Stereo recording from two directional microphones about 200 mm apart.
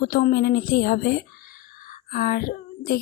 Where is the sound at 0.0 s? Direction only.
45° left (ahead or behind).